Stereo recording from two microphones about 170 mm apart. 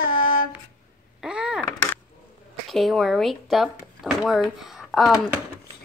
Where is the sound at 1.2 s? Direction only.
5° right (ahead or behind).